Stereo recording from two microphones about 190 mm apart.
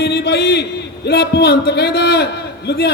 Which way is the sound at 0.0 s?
60° left (ahead or behind).